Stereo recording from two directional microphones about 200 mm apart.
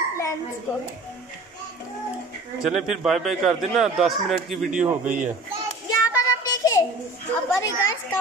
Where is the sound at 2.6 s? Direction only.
5° right (ahead or behind).